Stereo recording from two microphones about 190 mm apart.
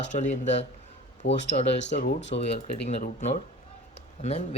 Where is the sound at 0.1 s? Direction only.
40° left (ahead or behind).